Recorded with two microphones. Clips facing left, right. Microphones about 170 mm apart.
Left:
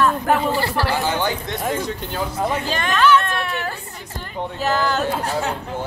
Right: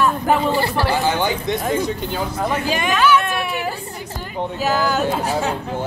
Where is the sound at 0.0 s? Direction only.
15° right (ahead or behind).